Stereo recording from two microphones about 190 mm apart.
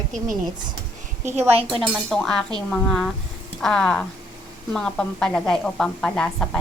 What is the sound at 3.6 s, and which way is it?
A woman's voice, 5° left (ahead or behind).